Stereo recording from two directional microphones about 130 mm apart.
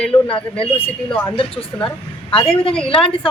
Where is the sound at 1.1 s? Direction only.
15° left (ahead or behind).